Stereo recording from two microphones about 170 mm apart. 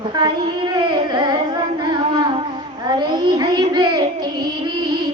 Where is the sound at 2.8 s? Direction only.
25° right (ahead or behind).